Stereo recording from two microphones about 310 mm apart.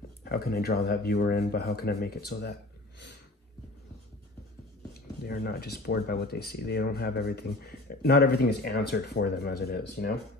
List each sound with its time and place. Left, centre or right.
0.2 s speech: left
5.2 s speech: left